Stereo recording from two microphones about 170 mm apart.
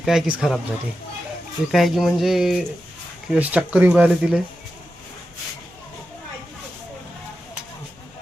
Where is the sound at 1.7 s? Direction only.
Centre (ahead or behind).